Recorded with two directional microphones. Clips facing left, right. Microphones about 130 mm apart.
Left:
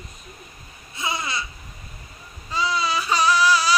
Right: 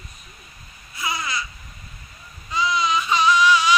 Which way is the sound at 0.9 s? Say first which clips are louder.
Even; 25° left (ahead or behind).